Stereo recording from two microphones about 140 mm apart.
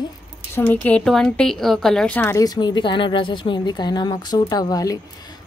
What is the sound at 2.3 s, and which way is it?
Speech, 30° left (ahead or behind).